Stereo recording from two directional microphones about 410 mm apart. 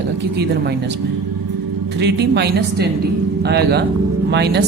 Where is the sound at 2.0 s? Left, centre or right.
Right.